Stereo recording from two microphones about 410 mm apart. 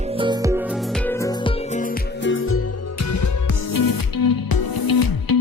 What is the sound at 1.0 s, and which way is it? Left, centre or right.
Music, centre.